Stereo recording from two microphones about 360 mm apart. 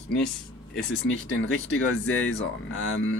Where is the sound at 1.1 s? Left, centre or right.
Left.